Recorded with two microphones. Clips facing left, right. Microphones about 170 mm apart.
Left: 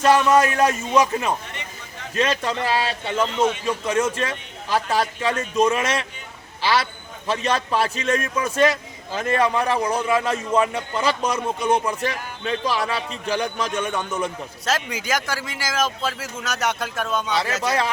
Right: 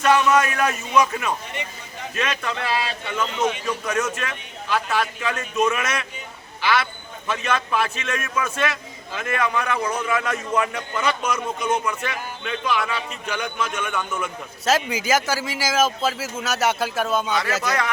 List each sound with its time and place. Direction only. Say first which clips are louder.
0.0 s a man's voice: left 2 dB; 30° left (ahead or behind)
14.6 s speech: right 4 dB; 5° right (ahead or behind)
17.6 s speech: left 2 dB; 30° left (ahead or behind)